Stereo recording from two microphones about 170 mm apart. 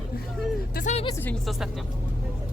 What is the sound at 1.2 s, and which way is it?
Speech, 5° left (ahead or behind).